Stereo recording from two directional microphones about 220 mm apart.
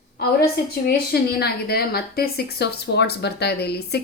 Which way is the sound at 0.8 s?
45° left (ahead or behind).